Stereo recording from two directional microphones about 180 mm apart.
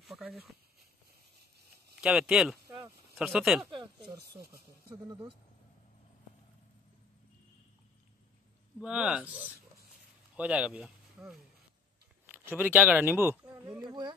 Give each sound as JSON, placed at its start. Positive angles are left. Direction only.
{"t": 0.0, "sound": "a sound", "side_deg": 0}
{"t": 2.0, "sound": "speech", "side_deg": -5}
{"t": 3.7, "sound": "a sound", "side_deg": -25}
{"t": 4.2, "sound": "speech", "side_deg": -60}
{"t": 5.0, "sound": "speech", "side_deg": -25}
{"t": 8.8, "sound": "speech", "side_deg": -5}